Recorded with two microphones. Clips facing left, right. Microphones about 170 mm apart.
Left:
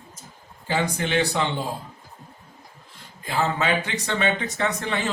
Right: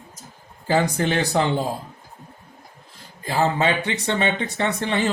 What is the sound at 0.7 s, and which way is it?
Speech, 40° right (ahead or behind).